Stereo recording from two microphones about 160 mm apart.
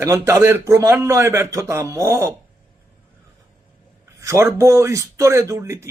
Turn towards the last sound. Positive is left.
turn(degrees=-15)  # may be behind; listen again after turning